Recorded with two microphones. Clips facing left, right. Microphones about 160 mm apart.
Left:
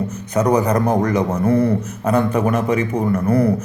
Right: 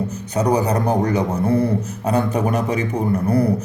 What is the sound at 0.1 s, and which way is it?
A man's voice, 30° right (ahead or behind).